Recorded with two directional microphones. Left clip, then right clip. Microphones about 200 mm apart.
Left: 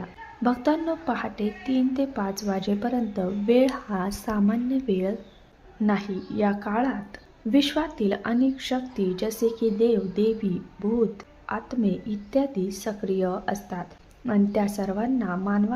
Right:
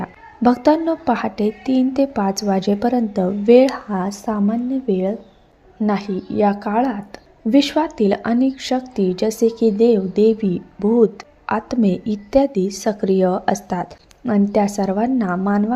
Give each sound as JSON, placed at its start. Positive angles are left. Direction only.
{"t": 0.0, "sound": "speech", "side_deg": -30}